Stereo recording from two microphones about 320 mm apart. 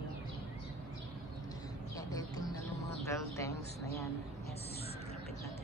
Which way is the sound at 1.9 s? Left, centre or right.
Centre.